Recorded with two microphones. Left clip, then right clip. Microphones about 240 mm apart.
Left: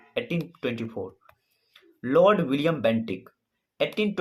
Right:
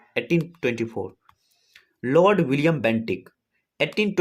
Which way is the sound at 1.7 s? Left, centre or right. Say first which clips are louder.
Right 2 dB; right.